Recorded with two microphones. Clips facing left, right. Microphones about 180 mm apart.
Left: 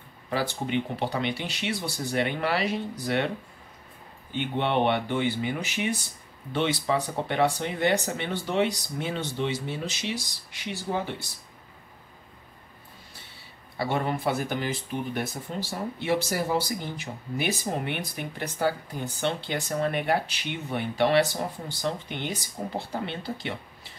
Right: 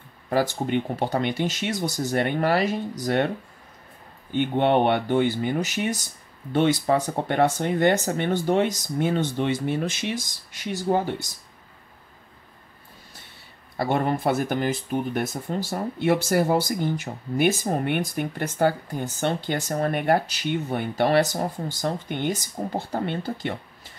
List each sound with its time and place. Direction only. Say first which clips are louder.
0.3 s speech: right 5 dB; 45° right (ahead or behind)
4.3 s speech: right 6 dB; 45° right (ahead or behind)
13.7 s speech: right 4 dB; 50° right (ahead or behind)